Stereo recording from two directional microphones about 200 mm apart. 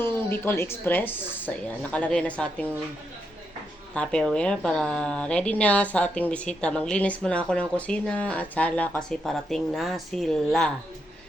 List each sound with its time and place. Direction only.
0.0 s speech: 10° left (ahead or behind)
3.9 s a woman's voice: 5° left (ahead or behind)